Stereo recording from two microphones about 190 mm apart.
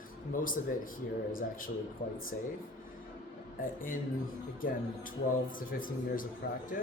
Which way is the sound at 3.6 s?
45° left (ahead or behind).